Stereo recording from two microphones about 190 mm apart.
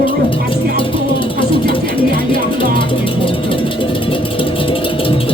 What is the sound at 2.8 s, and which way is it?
Music, 25° left (ahead or behind).